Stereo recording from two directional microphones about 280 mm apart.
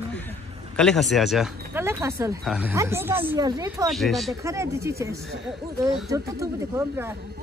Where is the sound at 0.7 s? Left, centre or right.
Centre.